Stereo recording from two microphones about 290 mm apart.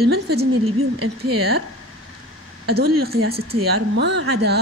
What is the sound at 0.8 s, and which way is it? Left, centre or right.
Speech, right.